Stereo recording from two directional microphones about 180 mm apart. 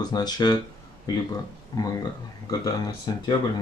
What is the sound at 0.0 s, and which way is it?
Speech, 20° left (ahead or behind).